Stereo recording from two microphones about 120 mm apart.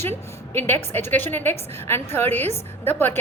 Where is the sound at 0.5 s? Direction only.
15° left (ahead or behind).